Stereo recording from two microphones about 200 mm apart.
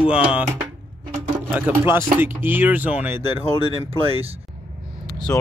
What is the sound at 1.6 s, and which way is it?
Speech, 10° right (ahead or behind).